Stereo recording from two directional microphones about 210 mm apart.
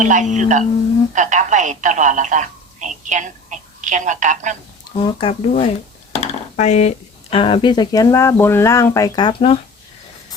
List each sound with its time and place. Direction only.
0.0 s speech: 35° right (ahead or behind)
4.9 s speech: 25° left (ahead or behind)